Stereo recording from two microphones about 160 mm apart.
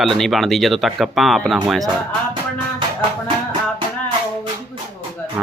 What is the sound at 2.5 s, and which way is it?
Music, 30° right (ahead or behind).